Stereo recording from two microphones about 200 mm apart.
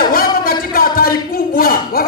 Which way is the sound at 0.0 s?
45° left (ahead or behind).